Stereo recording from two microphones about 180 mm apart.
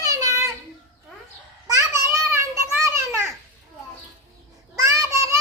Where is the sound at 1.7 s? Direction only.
15° right (ahead or behind).